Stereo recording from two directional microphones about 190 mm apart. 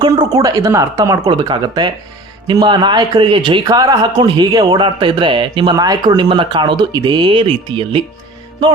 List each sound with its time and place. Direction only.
0.0 s speech: 20° right (ahead or behind)